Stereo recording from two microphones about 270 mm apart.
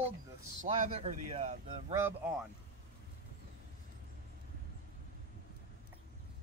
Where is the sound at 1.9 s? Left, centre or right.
Centre.